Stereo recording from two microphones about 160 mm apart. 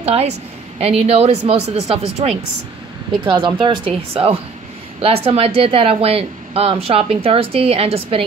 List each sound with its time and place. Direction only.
0.0 s a woman's voice: 40° right (ahead or behind)